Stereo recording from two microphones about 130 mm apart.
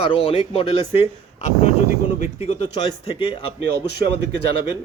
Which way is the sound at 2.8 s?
40° left (ahead or behind).